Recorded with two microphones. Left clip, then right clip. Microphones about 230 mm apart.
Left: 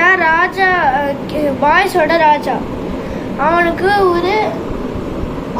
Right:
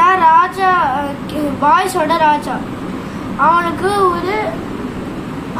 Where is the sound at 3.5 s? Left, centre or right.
Centre.